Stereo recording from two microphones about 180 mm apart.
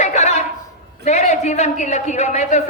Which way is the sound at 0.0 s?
40° left (ahead or behind).